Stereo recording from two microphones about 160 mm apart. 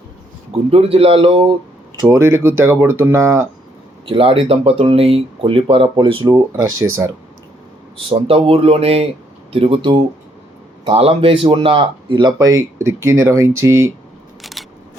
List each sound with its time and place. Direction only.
0.7 s speech: 35° right (ahead or behind)
2.0 s speech: 15° right (ahead or behind)
4.0 s speech: 35° right (ahead or behind)
7.9 s speech: 35° right (ahead or behind); by 13.9 s 15° right (ahead or behind)
14.4 s single-lens reflex camera: centre (ahead or behind)